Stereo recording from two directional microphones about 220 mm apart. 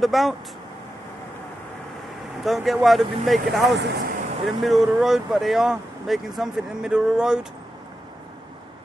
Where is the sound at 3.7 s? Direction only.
50° right (ahead or behind).